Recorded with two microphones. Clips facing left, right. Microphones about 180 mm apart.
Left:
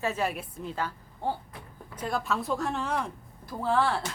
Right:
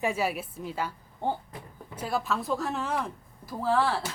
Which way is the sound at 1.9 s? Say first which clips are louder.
Even; 5° right (ahead or behind).